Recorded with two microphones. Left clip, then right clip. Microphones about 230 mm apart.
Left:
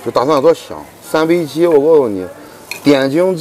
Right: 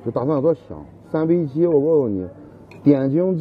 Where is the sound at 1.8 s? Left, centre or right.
Left.